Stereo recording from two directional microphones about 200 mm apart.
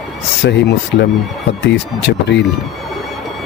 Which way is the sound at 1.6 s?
60° left (ahead or behind).